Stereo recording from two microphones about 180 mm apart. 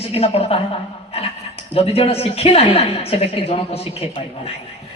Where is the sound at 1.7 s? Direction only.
30° left (ahead or behind).